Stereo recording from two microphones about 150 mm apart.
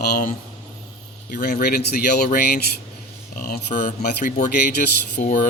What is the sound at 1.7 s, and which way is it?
Speech, 90° left.